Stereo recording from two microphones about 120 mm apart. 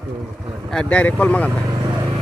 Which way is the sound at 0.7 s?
10° left (ahead or behind).